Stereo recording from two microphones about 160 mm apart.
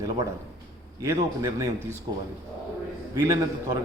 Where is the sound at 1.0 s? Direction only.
20° right (ahead or behind).